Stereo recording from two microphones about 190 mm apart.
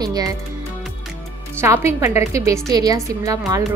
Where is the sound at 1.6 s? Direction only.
15° right (ahead or behind).